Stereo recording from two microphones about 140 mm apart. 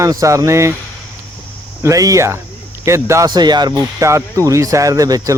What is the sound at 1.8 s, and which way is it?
Speech, 25° right (ahead or behind).